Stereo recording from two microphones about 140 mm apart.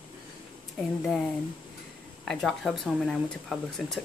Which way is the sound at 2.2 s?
Centre (ahead or behind).